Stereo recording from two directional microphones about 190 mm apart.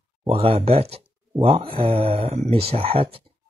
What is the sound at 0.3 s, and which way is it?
Speech, 30° right (ahead or behind).